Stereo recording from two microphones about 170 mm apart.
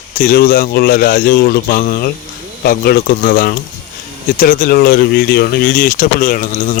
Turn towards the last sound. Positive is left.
turn(degrees=50)  # may be behind; listen again after turning